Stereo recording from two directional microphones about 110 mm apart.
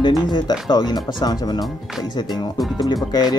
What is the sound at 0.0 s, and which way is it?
Speech, 40° left (ahead or behind).